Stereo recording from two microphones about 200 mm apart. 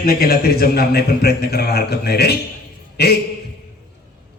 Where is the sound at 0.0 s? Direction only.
50° left (ahead or behind).